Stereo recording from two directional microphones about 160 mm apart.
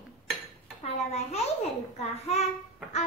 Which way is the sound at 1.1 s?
40° left (ahead or behind).